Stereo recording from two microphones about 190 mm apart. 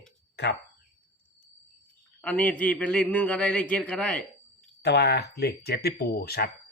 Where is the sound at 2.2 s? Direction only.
10° left (ahead or behind).